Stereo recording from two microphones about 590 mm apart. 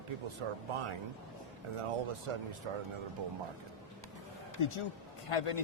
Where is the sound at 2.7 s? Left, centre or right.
Right.